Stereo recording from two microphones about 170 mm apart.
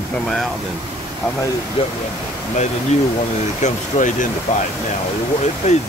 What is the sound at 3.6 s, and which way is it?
Speech, 50° left (ahead or behind).